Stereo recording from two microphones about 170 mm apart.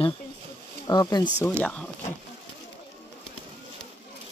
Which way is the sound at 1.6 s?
10° left (ahead or behind).